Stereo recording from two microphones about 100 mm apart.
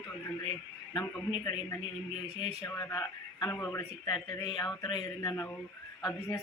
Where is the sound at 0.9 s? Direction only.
45° left (ahead or behind).